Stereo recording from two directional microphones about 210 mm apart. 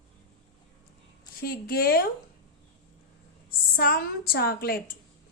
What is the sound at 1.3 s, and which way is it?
Speech, 45° left (ahead or behind).